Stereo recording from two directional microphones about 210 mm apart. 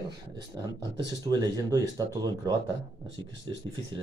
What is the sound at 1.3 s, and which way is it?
Speech, 20° right (ahead or behind).